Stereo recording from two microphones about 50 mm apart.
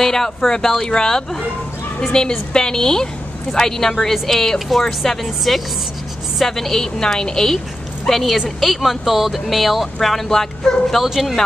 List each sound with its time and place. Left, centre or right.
0.0 s a woman's voice: centre
11.0 s speech: centre